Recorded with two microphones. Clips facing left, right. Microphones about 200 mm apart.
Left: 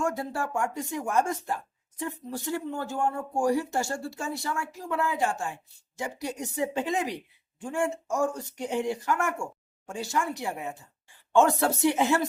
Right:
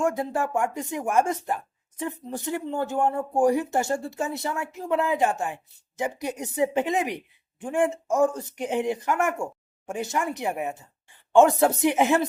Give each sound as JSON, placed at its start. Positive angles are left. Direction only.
{"t": 0.0, "sound": "speech", "side_deg": -20}